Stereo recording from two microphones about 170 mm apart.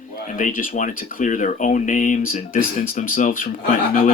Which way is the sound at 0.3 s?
55° left (ahead or behind).